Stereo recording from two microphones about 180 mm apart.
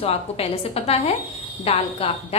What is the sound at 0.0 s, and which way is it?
A woman's voice, 35° left (ahead or behind).